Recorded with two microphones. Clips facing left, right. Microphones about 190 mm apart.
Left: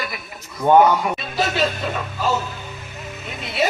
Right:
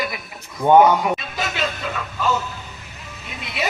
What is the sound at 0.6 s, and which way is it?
Speech, 15° right (ahead or behind).